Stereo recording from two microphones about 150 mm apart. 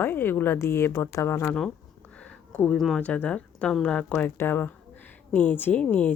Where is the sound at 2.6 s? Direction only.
5° left (ahead or behind).